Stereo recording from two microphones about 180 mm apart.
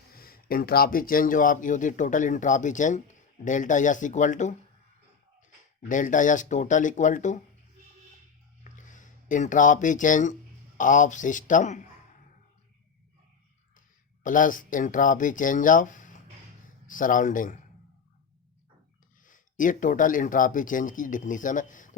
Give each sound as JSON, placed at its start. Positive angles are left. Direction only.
{"t": 0.1, "sound": "speech", "side_deg": 55}
{"t": 5.9, "sound": "speech", "side_deg": 45}
{"t": 8.7, "sound": "speech", "side_deg": 45}
{"t": 14.3, "sound": "speech", "side_deg": 50}
{"t": 19.2, "sound": "speech", "side_deg": 50}